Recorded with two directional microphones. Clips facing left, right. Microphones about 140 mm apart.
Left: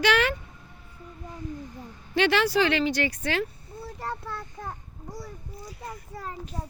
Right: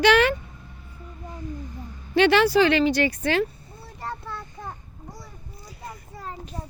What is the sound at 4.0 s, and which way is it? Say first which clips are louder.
Child singing: right 2 dB; centre (ahead or behind).